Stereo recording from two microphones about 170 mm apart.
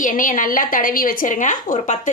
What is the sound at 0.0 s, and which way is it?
A woman's voice, 50° left (ahead or behind).